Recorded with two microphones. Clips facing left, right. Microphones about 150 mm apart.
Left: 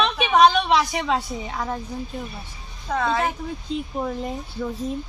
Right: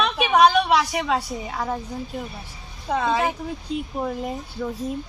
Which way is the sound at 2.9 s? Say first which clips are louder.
Right 1 dB; 15° right (ahead or behind).